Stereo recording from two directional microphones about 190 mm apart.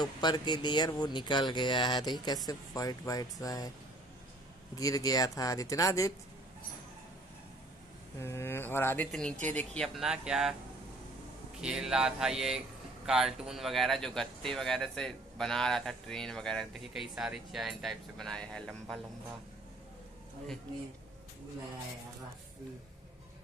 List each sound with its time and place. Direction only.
0.0 s speech: 25° left (ahead or behind)
4.7 s speech: 20° left (ahead or behind)
8.2 s speech: 15° left (ahead or behind); by 10.5 s 5° right (ahead or behind)
11.6 s speech: 5° right (ahead or behind)